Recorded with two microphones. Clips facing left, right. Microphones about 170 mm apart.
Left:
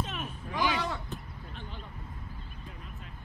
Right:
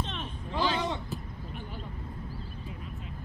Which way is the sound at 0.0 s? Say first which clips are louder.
Even; 10° left (ahead or behind).